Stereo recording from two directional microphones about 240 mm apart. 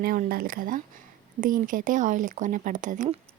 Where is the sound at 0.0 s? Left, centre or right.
Right.